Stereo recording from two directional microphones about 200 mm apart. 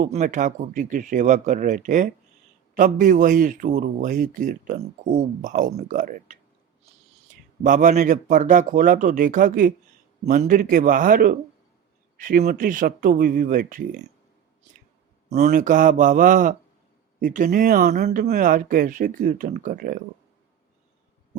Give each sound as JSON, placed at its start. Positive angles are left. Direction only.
{"t": 0.0, "sound": "a man's voice", "side_deg": -35}
{"t": 7.6, "sound": "a man's voice", "side_deg": -40}
{"t": 15.3, "sound": "a man's voice", "side_deg": -35}